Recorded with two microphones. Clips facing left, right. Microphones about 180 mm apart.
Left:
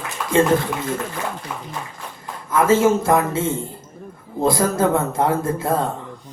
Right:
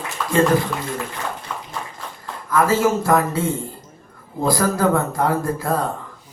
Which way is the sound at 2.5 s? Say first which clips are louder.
Left 2 dB; 25° left (ahead or behind).